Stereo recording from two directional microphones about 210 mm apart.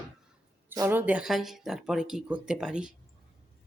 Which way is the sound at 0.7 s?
10° right (ahead or behind).